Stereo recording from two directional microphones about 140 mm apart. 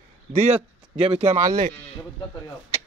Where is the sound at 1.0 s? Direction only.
45° right (ahead or behind).